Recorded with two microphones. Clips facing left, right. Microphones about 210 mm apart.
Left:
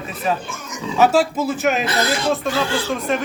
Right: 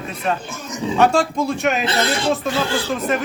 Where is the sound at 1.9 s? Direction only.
25° right (ahead or behind).